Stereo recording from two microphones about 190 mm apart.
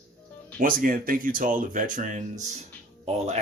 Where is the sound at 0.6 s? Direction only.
45° right (ahead or behind).